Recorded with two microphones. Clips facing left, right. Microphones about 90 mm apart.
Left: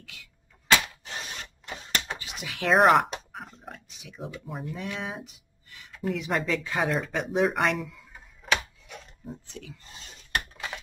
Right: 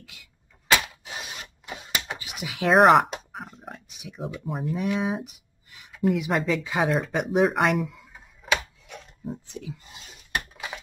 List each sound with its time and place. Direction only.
0.0 s a sound: 10° right (ahead or behind)
4.2 s speech: centre (ahead or behind)
5.2 s writing: 15° right (ahead or behind)
5.9 s speech: 5° right (ahead or behind)
8.8 s chopping: 5° right (ahead or behind)
9.5 s a sound: 15° right (ahead or behind)